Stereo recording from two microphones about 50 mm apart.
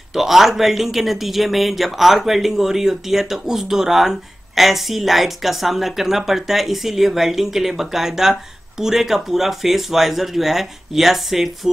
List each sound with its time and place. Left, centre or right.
0.1 s speech: centre